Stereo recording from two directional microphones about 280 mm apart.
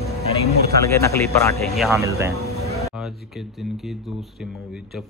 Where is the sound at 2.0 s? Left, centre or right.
Centre.